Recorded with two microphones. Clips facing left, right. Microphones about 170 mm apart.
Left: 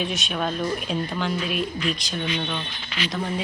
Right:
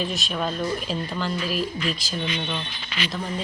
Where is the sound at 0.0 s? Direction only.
Centre (ahead or behind).